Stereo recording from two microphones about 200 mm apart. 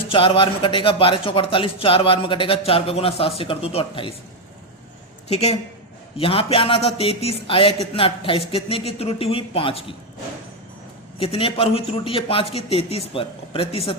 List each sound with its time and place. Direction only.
0.1 s a man's voice: 25° left (ahead or behind)
5.3 s a woman's voice: 30° left (ahead or behind)
11.2 s a man's voice: 25° left (ahead or behind)